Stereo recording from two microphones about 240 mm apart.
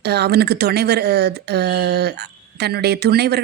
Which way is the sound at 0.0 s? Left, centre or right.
Right.